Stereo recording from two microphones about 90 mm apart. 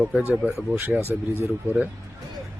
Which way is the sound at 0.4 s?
20° right (ahead or behind).